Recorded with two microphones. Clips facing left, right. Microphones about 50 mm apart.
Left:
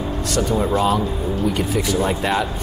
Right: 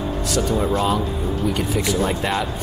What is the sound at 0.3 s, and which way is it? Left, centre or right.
Speech, centre.